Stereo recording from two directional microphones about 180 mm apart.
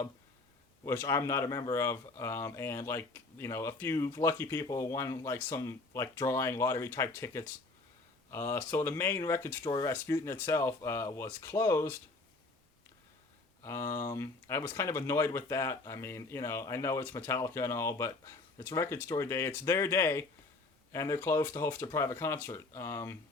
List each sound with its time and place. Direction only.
0.9 s speech: 15° left (ahead or behind)
13.7 s speech: 15° left (ahead or behind)